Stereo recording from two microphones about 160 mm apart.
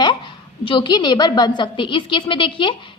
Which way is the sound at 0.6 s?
30° left (ahead or behind).